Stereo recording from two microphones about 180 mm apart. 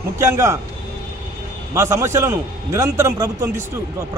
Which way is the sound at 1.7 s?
15° right (ahead or behind).